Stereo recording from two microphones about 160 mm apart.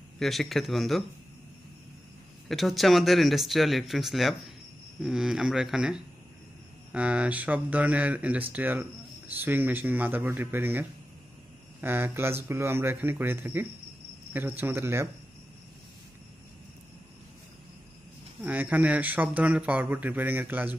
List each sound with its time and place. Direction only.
0.2 s speech: centre (ahead or behind)
2.4 s speech: centre (ahead or behind); by 15.0 s 15° right (ahead or behind)
18.4 s speech: 10° right (ahead or behind)